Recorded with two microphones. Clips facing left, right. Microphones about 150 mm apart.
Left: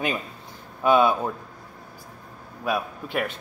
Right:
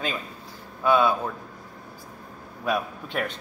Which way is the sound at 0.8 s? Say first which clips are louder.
Left 2 dB; 20° left (ahead or behind).